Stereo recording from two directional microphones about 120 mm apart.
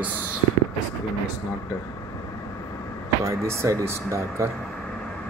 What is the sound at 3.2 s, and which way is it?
Speech, 25° right (ahead or behind).